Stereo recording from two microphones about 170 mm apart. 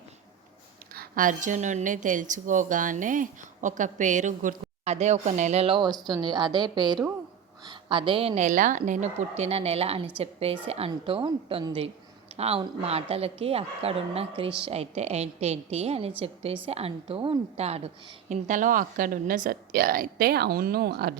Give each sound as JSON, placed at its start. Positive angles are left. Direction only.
{"t": 0.9, "sound": "a woman's voice", "side_deg": -55}